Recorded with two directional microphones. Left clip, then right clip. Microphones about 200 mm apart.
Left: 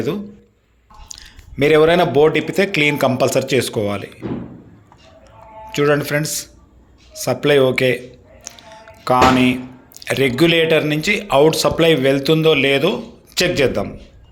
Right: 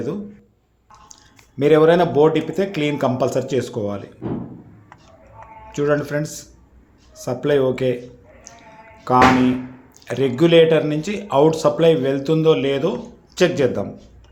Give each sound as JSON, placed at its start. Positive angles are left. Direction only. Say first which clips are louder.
{"t": 1.0, "sound": "speech", "louder": "left 8 dB", "side_deg": 5}
{"t": 5.7, "sound": "speech", "louder": "left 4 dB", "side_deg": 5}